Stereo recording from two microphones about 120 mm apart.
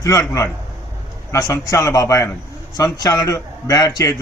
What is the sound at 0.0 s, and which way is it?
A man's voice, 25° left (ahead or behind).